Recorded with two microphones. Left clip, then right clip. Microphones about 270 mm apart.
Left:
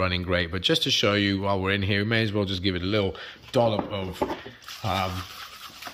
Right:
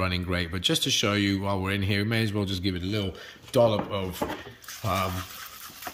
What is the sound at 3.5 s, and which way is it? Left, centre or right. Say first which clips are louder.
Speech: right 1 dB; centre.